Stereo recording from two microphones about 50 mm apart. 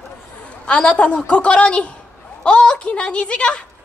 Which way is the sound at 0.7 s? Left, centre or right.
Left.